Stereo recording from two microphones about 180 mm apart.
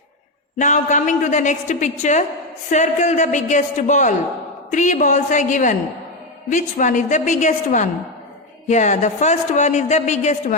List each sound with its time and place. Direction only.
0.6 s a woman's voice: 40° left (ahead or behind)